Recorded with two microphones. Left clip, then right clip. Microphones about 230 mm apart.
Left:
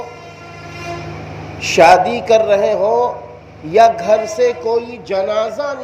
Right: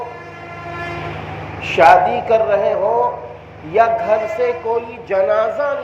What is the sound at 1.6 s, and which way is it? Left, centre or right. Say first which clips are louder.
A man's voice: left 1 dB; left.